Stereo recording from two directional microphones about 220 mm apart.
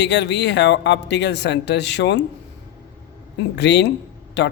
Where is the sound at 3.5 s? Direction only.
50° left (ahead or behind).